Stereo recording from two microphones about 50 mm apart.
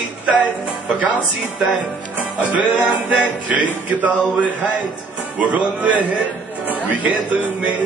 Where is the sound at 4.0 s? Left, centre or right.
Right.